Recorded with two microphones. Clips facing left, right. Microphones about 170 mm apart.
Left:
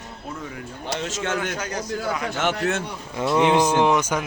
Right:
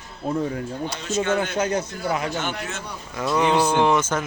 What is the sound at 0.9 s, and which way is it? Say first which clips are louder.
Speech: even; 90° left.